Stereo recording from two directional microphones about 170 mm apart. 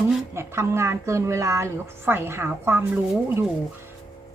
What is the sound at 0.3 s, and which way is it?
A woman's voice, 15° right (ahead or behind).